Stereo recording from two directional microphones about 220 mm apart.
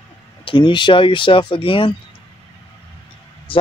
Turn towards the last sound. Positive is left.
turn(degrees=25)  # may be behind; listen again after turning